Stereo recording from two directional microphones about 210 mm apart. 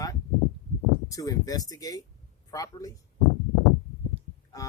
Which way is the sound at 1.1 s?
15° left (ahead or behind).